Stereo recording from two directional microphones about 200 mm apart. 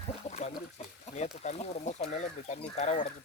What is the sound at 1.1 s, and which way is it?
Speech, 35° left (ahead or behind).